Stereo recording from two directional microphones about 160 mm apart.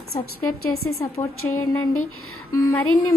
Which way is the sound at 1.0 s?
15° left (ahead or behind).